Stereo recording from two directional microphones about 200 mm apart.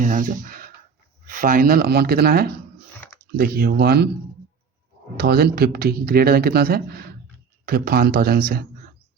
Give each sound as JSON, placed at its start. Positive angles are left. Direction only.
{"t": 0.0, "sound": "speech", "side_deg": -40}
{"t": 5.1, "sound": "speech", "side_deg": -50}